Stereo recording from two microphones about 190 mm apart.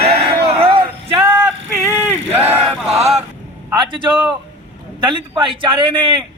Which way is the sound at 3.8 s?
25° right (ahead or behind).